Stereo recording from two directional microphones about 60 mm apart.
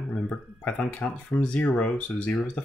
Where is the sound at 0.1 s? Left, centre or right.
Centre.